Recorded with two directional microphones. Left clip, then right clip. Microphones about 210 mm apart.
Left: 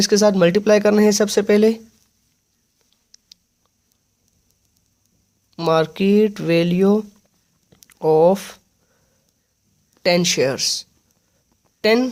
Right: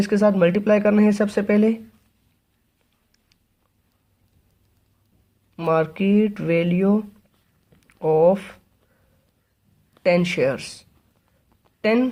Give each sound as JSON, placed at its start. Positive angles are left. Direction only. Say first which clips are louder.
{"t": 0.0, "sound": "speech", "louder": "left 3 dB", "side_deg": 40}
{"t": 5.5, "sound": "speech", "louder": "left 3 dB", "side_deg": 45}
{"t": 7.7, "sound": "a sound", "louder": "left 4 dB", "side_deg": 45}
{"t": 10.0, "sound": "speech", "louder": "left 2 dB", "side_deg": 40}